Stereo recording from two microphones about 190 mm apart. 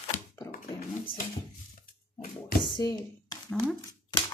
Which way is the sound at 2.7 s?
20° left (ahead or behind).